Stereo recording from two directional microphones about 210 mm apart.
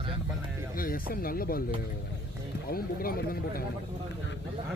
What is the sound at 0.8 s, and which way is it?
Speech, 45° left (ahead or behind).